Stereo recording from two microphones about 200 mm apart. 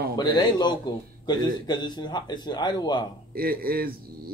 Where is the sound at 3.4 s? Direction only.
50° right (ahead or behind).